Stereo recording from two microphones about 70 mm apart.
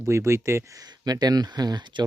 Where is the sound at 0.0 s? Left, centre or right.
Right.